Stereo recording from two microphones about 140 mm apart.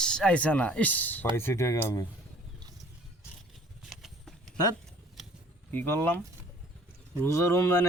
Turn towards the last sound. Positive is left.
turn(degrees=20)  # may be behind; listen again after turning